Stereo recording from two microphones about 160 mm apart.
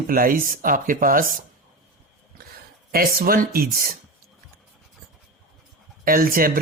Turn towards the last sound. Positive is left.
turn(degrees=-60)  # may be behind; listen again after turning